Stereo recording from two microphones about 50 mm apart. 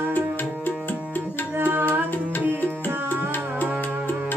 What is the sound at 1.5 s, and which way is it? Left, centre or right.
Music, right.